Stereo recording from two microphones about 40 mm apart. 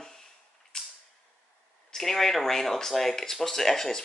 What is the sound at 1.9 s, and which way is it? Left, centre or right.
Speech, centre.